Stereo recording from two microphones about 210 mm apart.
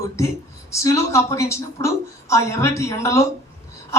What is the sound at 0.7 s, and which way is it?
A woman's voice, 15° left (ahead or behind).